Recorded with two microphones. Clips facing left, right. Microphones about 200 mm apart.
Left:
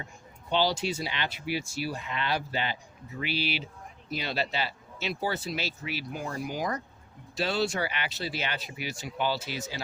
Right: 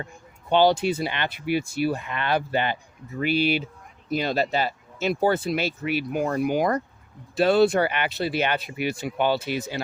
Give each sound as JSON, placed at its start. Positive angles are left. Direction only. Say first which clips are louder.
{"t": 0.5, "sound": "speech", "louder": "right 8 dB", "side_deg": -55}